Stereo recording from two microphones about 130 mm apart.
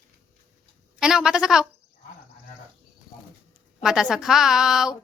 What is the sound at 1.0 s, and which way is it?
Speech, 5° right (ahead or behind).